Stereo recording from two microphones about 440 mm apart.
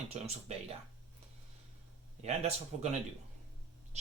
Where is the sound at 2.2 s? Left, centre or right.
Centre.